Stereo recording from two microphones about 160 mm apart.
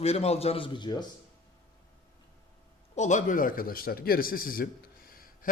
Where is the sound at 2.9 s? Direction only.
50° left (ahead or behind).